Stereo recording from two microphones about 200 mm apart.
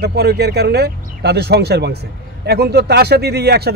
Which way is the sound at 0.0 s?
55° right (ahead or behind).